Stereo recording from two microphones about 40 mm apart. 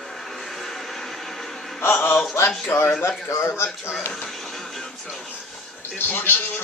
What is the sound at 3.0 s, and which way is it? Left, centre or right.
Speech, left.